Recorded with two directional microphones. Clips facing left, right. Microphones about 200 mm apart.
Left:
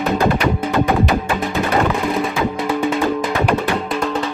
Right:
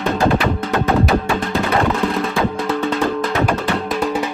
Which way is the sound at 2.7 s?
10° left (ahead or behind).